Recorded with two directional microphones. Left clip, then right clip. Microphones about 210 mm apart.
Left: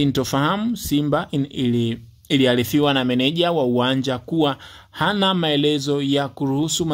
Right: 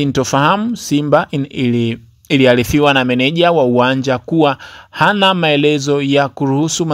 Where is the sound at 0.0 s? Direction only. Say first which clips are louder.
Right 7 dB; 25° right (ahead or behind).